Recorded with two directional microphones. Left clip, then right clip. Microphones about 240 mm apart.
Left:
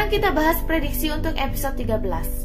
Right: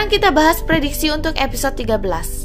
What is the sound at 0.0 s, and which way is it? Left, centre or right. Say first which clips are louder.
A woman's voice: right 7 dB; right.